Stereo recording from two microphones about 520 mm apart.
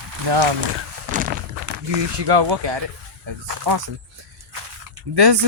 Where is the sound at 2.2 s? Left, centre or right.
Right.